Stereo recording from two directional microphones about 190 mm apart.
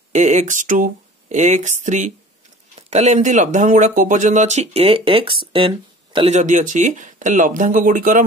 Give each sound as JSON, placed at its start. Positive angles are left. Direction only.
{"t": 0.1, "sound": "speech", "side_deg": -40}
{"t": 6.3, "sound": "speech", "side_deg": -40}